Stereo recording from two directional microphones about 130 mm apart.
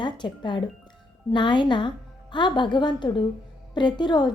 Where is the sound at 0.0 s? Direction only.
35° left (ahead or behind).